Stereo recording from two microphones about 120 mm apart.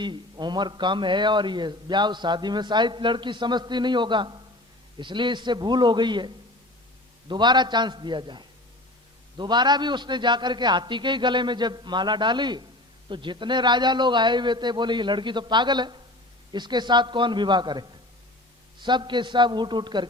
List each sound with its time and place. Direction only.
0.0 s a man's voice: 40° right (ahead or behind)